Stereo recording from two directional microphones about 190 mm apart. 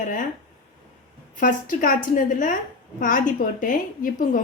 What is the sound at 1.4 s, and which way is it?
A woman's voice, 45° left (ahead or behind).